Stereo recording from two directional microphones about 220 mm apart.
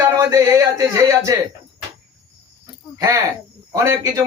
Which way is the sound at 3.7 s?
15° right (ahead or behind).